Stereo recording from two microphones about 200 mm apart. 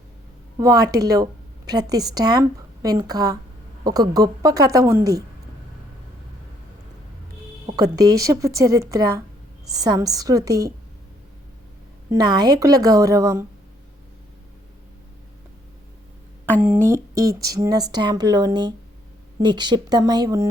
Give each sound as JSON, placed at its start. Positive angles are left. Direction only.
{"t": 0.6, "sound": "speech", "side_deg": -15}
{"t": 7.7, "sound": "speech", "side_deg": -20}
{"t": 12.1, "sound": "speech", "side_deg": -20}
{"t": 16.6, "sound": "speech", "side_deg": -10}